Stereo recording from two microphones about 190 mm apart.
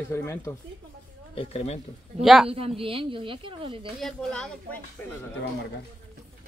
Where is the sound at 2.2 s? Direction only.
Centre (ahead or behind).